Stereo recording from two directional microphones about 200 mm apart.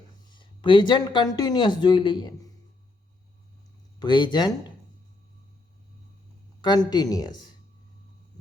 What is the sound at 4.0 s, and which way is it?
Speech, 20° left (ahead or behind).